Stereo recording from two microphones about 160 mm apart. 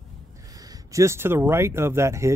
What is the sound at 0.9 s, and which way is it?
Speech, 20° right (ahead or behind).